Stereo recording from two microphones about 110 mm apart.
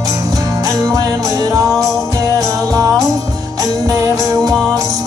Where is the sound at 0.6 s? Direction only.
35° right (ahead or behind).